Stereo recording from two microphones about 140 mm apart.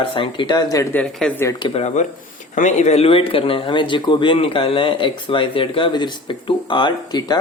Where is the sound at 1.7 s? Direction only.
50° left (ahead or behind).